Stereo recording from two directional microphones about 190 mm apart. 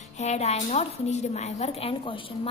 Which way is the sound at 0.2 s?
35° left (ahead or behind).